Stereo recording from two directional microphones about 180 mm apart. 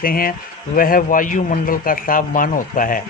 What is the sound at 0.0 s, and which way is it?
A man's voice, 50° left (ahead or behind).